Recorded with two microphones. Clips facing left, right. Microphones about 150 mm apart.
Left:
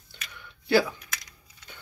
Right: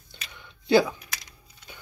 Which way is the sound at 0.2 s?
20° right (ahead or behind).